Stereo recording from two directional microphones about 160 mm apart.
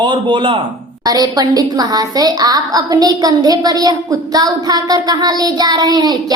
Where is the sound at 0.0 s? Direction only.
30° right (ahead or behind).